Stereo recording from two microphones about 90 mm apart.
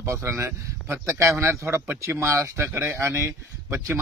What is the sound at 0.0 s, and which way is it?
Speech, 30° right (ahead or behind).